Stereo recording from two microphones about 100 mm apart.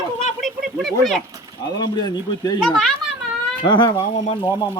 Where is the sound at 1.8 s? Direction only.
45° left (ahead or behind).